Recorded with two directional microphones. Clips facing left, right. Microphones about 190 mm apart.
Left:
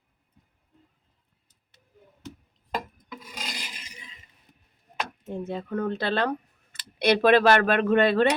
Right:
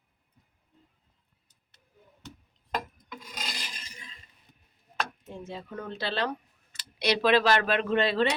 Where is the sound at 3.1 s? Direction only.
5° left (ahead or behind).